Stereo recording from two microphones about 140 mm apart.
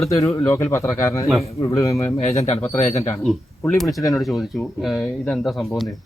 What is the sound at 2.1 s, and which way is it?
Speech, 50° left (ahead or behind).